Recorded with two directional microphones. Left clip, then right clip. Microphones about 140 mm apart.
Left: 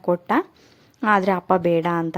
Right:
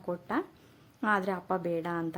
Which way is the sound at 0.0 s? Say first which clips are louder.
Left 13 dB; 45° left (ahead or behind).